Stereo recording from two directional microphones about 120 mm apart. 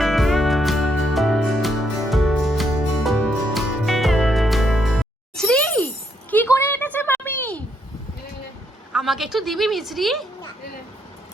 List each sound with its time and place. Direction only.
0.0 s music: centre (ahead or behind)
6.5 s a sound: 20° left (ahead or behind)
8.9 s a woman's voice: 5° right (ahead or behind)